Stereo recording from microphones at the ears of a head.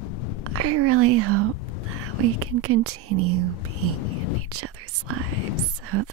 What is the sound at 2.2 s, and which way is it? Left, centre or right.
Speech, right.